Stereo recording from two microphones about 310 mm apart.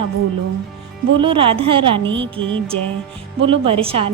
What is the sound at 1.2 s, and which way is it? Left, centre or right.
A woman's voice, centre.